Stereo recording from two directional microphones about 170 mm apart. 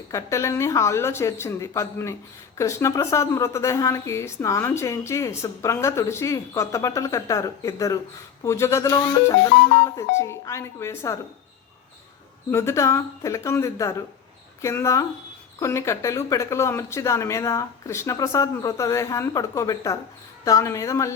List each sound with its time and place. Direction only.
0.1 s a woman's voice: 15° left (ahead or behind)
12.5 s a woman's voice: 15° left (ahead or behind)